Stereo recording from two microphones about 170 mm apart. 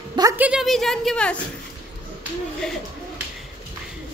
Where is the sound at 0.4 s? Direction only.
5° right (ahead or behind).